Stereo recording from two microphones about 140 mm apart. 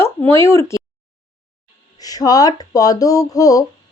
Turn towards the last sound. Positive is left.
turn(degrees=25)  # may be behind; listen again after turning